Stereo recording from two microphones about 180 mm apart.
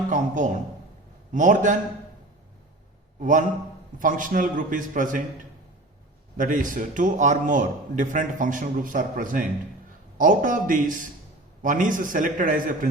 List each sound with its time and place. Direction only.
0.1 s a man's voice: 45° right (ahead or behind)
3.2 s a man's voice: 45° right (ahead or behind)
6.3 s a man's voice: 50° right (ahead or behind)